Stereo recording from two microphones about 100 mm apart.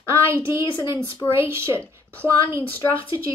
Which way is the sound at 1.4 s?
25° right (ahead or behind).